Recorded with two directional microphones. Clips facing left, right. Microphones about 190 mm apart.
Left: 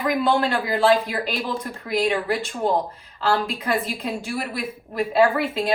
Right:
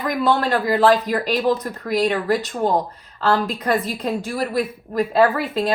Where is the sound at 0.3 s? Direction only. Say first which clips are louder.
Right 2 dB; 40° right (ahead or behind).